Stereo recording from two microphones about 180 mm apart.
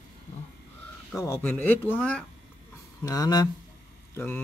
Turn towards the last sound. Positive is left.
turn(degrees=10)  # may be behind; listen again after turning